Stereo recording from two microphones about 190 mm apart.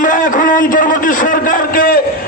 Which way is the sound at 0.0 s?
45° left (ahead or behind).